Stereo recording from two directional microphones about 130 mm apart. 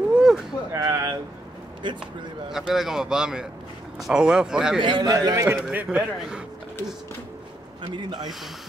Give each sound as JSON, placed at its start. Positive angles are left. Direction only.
{"t": 0.1, "sound": "a sound", "side_deg": -5}
{"t": 0.7, "sound": "a sound", "side_deg": -25}
{"t": 2.5, "sound": "speech", "side_deg": -5}
{"t": 4.7, "sound": "a man's voice", "side_deg": -35}
{"t": 5.7, "sound": "speech", "side_deg": -10}
{"t": 7.8, "sound": "a man's voice", "side_deg": -35}